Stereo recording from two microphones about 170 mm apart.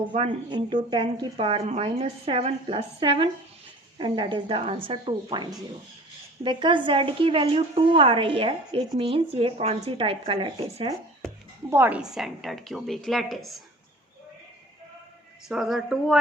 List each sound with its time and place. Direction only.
0.1 s a woman's voice: 35° right (ahead or behind)
11.7 s a woman's voice: 10° right (ahead or behind)
15.4 s a woman's voice: centre (ahead or behind)